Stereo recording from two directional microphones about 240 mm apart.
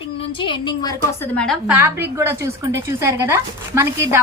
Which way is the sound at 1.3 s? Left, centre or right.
Centre.